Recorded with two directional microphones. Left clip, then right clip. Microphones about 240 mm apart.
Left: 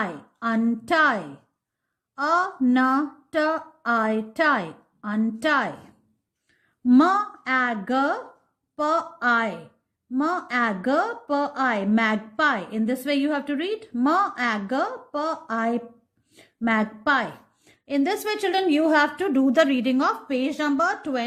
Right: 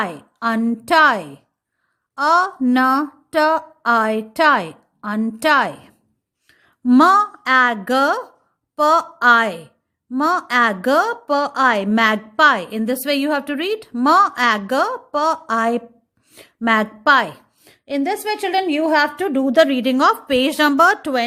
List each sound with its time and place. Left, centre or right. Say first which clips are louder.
0.0 s a woman's voice: right 6 dB; right